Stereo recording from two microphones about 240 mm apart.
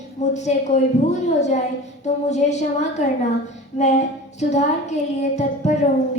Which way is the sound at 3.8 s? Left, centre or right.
Left.